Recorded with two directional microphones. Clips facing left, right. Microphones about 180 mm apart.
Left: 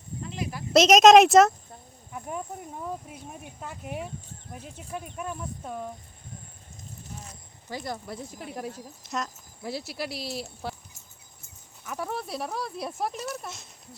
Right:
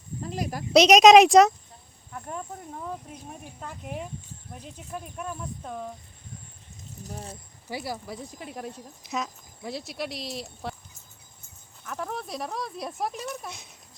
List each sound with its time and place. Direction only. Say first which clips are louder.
0.2 s speech: right 3 dB; 40° right (ahead or behind)
0.7 s speech: right 1 dB; centre (ahead or behind)
7.0 s speech: right 7 dB; 35° right (ahead or behind)
7.7 s speech: right 1 dB; 10° right (ahead or behind)
11.9 s speech: left 1 dB; 5° left (ahead or behind)